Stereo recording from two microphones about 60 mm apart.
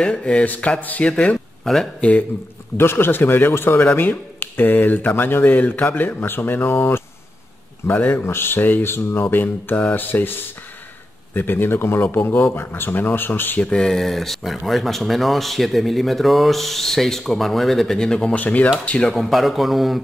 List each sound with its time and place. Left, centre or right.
0.0 s speech: centre
1.6 s speech: centre
2.0 s speech: left
2.8 s a man's voice: left
13.6 s speech: centre
18.3 s speech: left
19.0 s speech: centre